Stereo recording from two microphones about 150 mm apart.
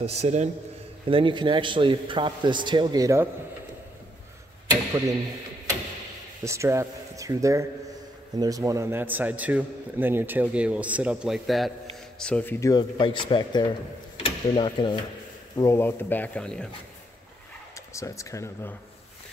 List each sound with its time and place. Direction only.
0.0 s a man's voice: 45° right (ahead or behind)
1.0 s a man's voice: 35° right (ahead or behind)
6.4 s a man's voice: 20° right (ahead or behind); by 12.5 s 10° left (ahead or behind)
12.5 s speech: 20° left (ahead or behind)
12.9 s a man's voice: 35° left (ahead or behind)
15.5 s speech: 20° left (ahead or behind)
17.7 s speech: 20° left (ahead or behind)